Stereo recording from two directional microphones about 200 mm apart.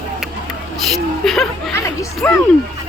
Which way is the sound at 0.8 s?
Centre (ahead or behind).